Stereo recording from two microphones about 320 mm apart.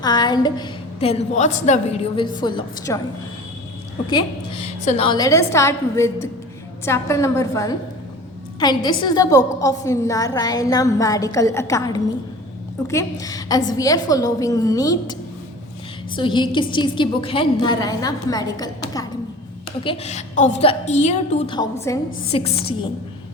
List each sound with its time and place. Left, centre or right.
0.0 s a woman's voice: centre
4.1 s a woman's voice: centre
16.1 s a woman's voice: centre
19.8 s a woman's voice: centre